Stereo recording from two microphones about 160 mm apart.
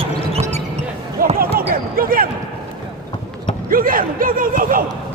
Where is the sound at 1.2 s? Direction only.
60° right (ahead or behind).